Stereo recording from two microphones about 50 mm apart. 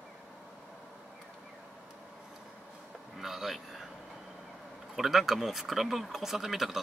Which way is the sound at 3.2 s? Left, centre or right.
Centre.